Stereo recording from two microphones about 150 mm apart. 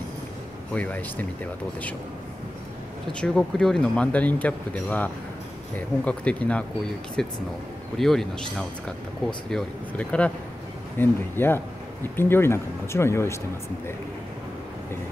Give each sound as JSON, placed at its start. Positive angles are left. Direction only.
{"t": 0.7, "sound": "speech", "side_deg": 10}
{"t": 3.1, "sound": "speech", "side_deg": 5}